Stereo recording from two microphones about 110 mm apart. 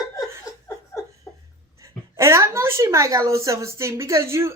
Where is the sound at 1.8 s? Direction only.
25° right (ahead or behind).